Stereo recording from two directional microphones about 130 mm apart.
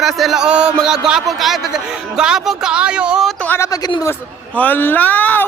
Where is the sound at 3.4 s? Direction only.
20° left (ahead or behind).